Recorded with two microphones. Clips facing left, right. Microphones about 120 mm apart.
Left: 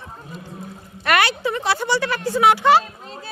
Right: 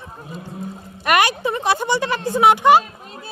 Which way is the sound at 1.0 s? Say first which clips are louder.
Right 2 dB; 15° right (ahead or behind).